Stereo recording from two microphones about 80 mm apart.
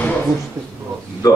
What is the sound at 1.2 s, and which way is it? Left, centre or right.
Speech, left.